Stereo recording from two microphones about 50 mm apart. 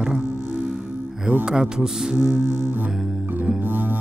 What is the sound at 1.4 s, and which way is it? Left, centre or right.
Speech, centre.